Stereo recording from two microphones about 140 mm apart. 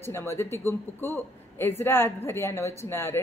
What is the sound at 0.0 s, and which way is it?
A woman's voice, 20° left (ahead or behind).